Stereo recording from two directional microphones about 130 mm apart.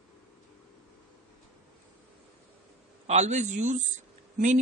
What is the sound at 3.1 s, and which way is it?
Speech, 60° right (ahead or behind).